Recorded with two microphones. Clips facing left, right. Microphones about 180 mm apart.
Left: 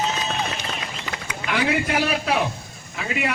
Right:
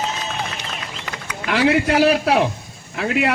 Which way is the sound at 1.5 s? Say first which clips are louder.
Right 6 dB; 80° right.